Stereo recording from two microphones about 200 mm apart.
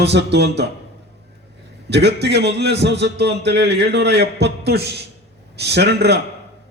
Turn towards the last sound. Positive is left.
turn(degrees=-55)  # may be behind; listen again after turning